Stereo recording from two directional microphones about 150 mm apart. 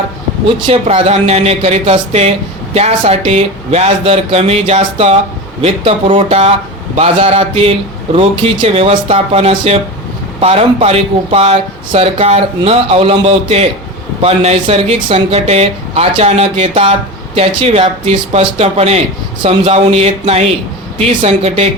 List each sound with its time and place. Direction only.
0.4 s speech: 40° right (ahead or behind)